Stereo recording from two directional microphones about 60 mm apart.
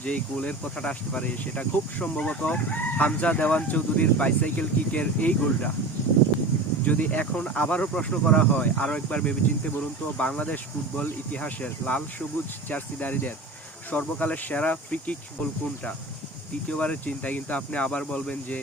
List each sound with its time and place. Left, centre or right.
0.0 s speech: left
6.8 s speech: left
16.6 s speech: left